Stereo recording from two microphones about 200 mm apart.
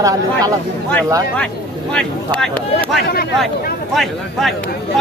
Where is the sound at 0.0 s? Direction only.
15° right (ahead or behind).